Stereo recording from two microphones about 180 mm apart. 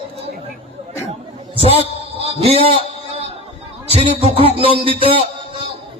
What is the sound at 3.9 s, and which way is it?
A man's voice, 35° right (ahead or behind).